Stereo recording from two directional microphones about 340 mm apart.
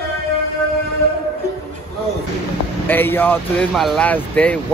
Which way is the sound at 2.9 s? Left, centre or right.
Centre.